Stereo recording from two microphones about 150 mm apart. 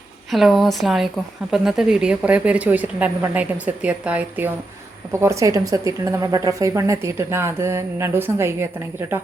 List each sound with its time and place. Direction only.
0.3 s a woman's voice: centre (ahead or behind)